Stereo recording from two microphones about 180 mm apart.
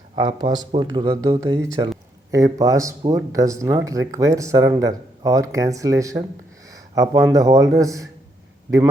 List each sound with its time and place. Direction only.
0.2 s speech: 25° right (ahead or behind)
6.7 s a sound: 20° right (ahead or behind)
7.3 s speech: 15° right (ahead or behind)